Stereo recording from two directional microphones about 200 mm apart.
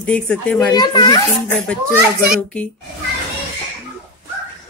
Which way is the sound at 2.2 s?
5° left (ahead or behind).